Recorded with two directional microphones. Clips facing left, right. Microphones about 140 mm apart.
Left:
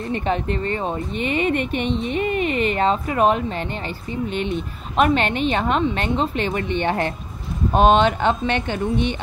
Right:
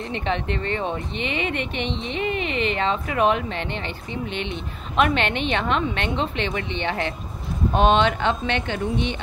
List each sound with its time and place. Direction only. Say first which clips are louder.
0.1 s a woman's voice: left 4 dB; 40° left (ahead or behind)